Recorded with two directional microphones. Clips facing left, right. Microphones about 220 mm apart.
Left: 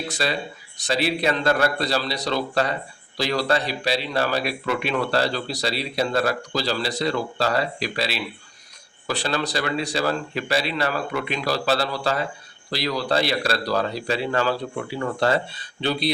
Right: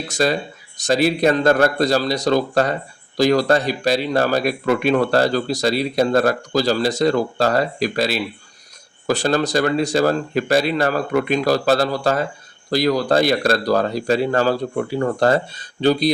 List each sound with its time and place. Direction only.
0.1 s speech: 45° right (ahead or behind)